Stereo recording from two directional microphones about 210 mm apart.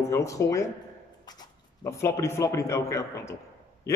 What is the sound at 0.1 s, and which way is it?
A man's voice, 15° left (ahead or behind).